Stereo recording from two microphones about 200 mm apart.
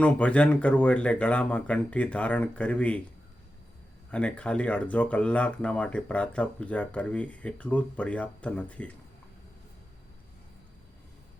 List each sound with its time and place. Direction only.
0.0 s speech: 5° left (ahead or behind)
4.1 s speech: 5° left (ahead or behind)